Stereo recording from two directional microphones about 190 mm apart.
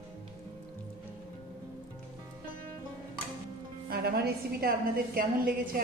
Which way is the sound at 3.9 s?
55° right (ahead or behind).